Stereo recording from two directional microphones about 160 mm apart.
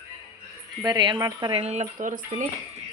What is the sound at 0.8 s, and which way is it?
Speech, 25° right (ahead or behind).